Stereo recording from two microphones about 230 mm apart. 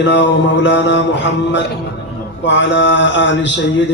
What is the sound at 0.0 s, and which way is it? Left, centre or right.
Mantra, left.